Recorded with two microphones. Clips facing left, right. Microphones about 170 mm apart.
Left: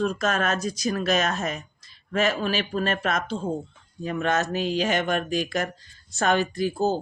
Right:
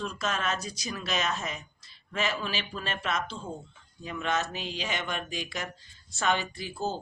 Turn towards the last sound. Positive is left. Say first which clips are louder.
# left 10 dB
turn(degrees=40)  # may be behind; listen again after turning